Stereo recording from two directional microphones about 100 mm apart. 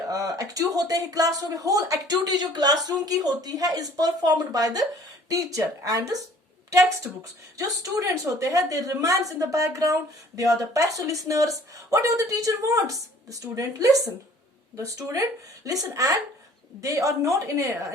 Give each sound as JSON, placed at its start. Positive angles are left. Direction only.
{"t": 0.1, "sound": "a woman's voice", "side_deg": -35}